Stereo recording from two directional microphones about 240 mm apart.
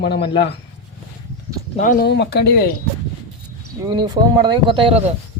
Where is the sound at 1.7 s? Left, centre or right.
Left.